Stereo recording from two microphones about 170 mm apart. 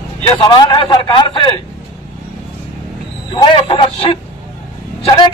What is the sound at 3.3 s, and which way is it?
Speech, 35° left (ahead or behind).